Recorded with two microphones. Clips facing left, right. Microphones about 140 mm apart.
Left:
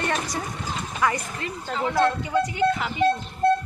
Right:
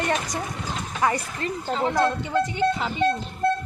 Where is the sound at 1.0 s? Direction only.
30° right (ahead or behind).